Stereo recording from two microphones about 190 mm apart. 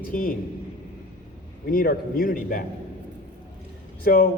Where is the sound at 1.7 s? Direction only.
50° left (ahead or behind).